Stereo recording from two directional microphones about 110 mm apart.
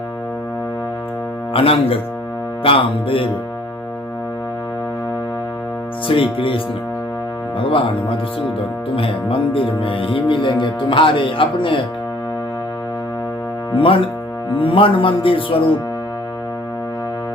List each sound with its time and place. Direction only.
1.5 s speech: 60° left (ahead or behind)
6.1 s music: 55° left (ahead or behind)
7.6 s music: 50° left (ahead or behind)
13.7 s music: 50° left (ahead or behind)